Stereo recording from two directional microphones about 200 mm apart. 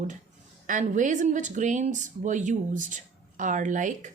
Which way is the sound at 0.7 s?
40° right (ahead or behind).